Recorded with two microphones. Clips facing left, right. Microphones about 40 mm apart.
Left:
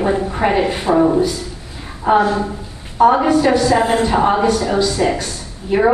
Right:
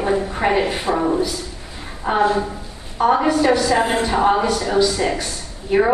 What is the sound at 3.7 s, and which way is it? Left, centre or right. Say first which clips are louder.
Speech: left 3 dB; centre.